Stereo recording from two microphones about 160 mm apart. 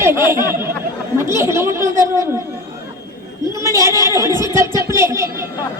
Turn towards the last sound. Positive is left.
turn(degrees=-15)  # may be behind; listen again after turning